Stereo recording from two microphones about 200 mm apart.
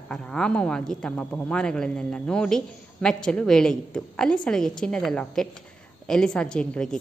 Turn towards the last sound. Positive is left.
turn(degrees=5)  # may be behind; listen again after turning